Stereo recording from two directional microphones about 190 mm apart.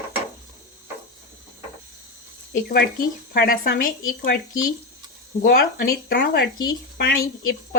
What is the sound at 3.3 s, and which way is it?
Speech, 55° left (ahead or behind).